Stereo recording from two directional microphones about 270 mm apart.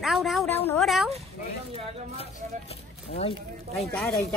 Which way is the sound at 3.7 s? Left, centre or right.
Centre.